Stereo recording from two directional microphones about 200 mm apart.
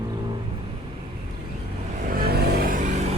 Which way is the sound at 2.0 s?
50° right (ahead or behind).